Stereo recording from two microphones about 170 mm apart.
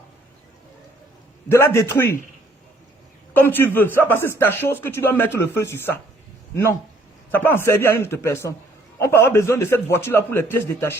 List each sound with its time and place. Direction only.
1.5 s a man's voice: 15° left (ahead or behind)
3.3 s a man's voice: 10° left (ahead or behind)
7.3 s a man's voice: 10° left (ahead or behind)